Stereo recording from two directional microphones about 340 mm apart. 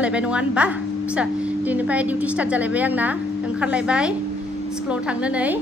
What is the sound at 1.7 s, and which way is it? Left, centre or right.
A woman's voice, centre.